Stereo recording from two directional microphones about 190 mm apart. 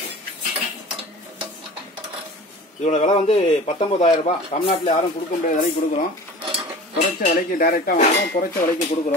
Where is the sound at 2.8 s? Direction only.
40° left (ahead or behind).